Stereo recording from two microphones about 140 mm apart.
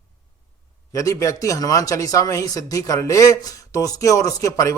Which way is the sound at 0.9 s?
25° left (ahead or behind).